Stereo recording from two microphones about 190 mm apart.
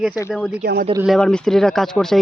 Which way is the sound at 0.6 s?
55° right (ahead or behind).